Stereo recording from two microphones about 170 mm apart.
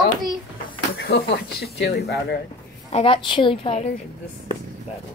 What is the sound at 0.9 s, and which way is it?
Speech, 70° left (ahead or behind).